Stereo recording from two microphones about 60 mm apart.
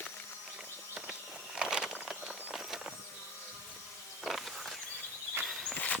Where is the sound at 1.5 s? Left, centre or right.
Centre.